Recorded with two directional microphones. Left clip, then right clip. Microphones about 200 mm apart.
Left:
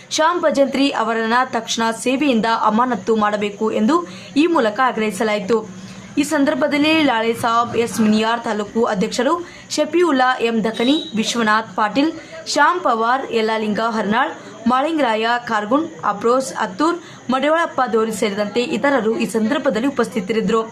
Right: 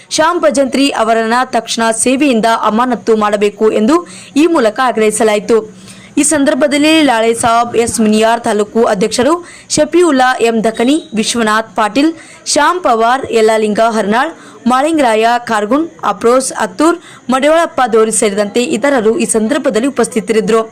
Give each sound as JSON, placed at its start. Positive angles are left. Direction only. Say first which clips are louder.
{"t": 0.1, "sound": "a woman's voice", "louder": "right 6 dB", "side_deg": -30}